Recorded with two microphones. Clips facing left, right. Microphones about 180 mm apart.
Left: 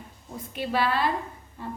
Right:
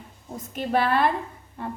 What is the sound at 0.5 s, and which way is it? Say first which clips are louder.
Speech: right 3 dB; 50° right (ahead or behind).